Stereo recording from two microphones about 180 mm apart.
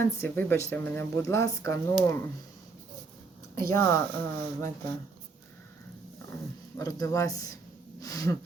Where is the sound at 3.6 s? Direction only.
15° left (ahead or behind).